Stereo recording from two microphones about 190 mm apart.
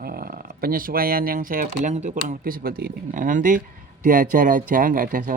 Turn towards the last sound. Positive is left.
turn(degrees=-45)  # may be behind; listen again after turning